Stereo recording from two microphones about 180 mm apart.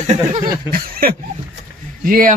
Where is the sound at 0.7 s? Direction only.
55° right (ahead or behind).